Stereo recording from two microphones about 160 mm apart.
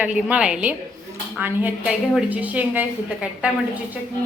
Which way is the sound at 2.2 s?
10° right (ahead or behind).